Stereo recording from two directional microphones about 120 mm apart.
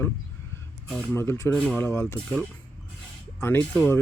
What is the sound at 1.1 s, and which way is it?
Speech, 20° left (ahead or behind).